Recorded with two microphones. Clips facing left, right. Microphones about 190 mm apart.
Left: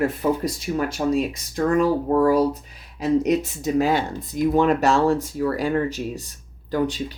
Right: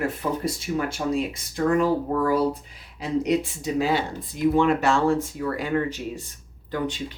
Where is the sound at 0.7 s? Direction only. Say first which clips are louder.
Left 4 dB; 40° left (ahead or behind).